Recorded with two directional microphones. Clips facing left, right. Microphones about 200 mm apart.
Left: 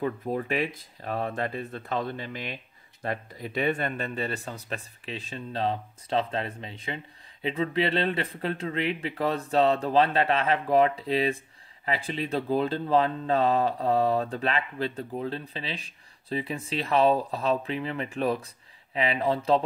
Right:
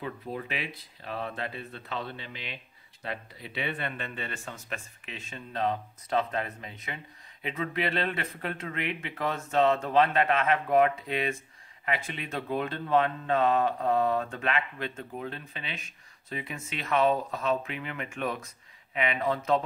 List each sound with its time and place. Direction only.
0.0 s speech: 45° left (ahead or behind)